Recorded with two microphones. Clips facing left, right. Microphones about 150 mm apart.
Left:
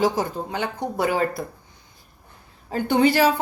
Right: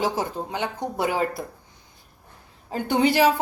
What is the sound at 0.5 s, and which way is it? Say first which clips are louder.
Speech: left 2 dB; 15° right (ahead or behind).